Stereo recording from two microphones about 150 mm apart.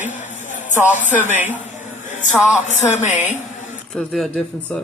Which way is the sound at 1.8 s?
55° left (ahead or behind).